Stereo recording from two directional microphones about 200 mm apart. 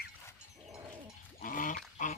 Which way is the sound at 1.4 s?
40° left (ahead or behind).